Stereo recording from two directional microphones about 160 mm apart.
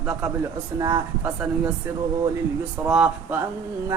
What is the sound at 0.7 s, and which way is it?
Speech, 25° right (ahead or behind).